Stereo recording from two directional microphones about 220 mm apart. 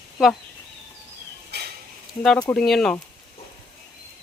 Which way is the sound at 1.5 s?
50° right (ahead or behind).